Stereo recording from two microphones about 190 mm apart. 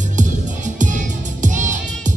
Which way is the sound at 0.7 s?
40° right (ahead or behind).